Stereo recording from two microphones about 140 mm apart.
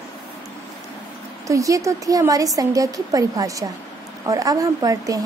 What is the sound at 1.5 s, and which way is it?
A woman's voice, 25° right (ahead or behind).